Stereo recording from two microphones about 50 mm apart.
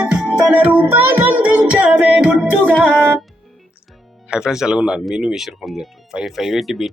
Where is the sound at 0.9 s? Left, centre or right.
Right.